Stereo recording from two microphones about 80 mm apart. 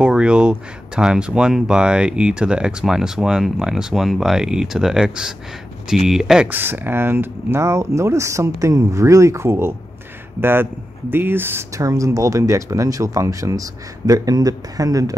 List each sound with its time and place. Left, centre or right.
0.0 s speech: centre
6.5 s speech: right
11.7 s speech: right